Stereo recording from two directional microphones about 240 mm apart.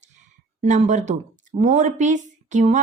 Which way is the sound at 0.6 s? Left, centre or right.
Right.